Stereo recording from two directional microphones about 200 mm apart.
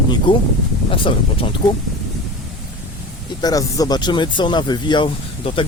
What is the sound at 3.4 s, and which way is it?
Speech, 20° left (ahead or behind).